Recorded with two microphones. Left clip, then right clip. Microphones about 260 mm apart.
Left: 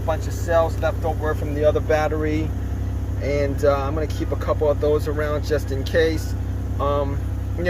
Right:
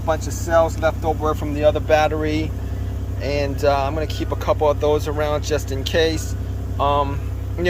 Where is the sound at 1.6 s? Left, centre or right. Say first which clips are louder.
Right 3 dB; centre.